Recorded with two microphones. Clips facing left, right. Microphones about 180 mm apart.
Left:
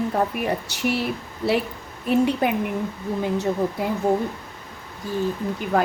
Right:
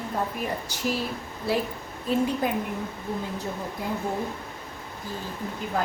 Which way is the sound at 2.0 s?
70° left (ahead or behind).